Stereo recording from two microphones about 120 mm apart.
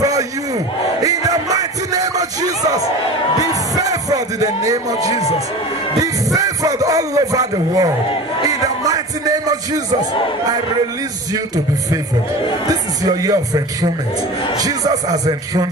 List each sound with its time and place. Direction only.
1.0 s music: 30° right (ahead or behind)
11.3 s speech: 30° right (ahead or behind)
13.0 s speech: 30° right (ahead or behind)